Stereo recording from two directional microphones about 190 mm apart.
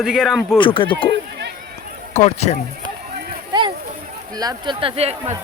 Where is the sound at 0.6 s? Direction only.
25° left (ahead or behind).